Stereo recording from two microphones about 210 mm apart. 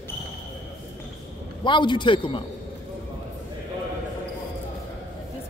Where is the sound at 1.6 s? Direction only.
20° left (ahead or behind).